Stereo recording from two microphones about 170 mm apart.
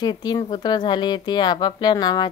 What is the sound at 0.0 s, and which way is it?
Speech, 25° left (ahead or behind).